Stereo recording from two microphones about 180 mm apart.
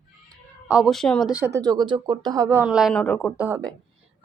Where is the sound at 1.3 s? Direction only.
15° right (ahead or behind); by 3.3 s 5° left (ahead or behind).